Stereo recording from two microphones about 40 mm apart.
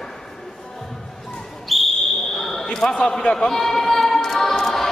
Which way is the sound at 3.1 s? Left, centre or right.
Left.